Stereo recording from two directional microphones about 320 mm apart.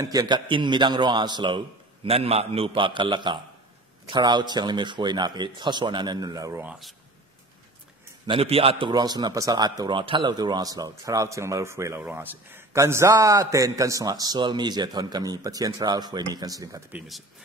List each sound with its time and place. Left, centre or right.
0.0 s a man's voice: centre
8.3 s a man's voice: centre